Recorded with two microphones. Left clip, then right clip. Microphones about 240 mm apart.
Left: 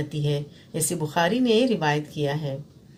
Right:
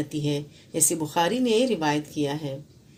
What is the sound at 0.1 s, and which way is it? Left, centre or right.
A woman's voice, right.